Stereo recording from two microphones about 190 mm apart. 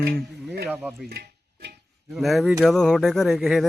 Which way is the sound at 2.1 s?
Centre (ahead or behind).